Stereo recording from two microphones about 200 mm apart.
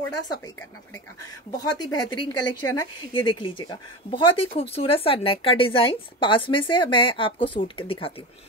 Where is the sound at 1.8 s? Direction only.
20° left (ahead or behind).